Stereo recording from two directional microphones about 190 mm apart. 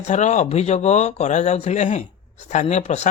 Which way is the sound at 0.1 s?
40° left (ahead or behind).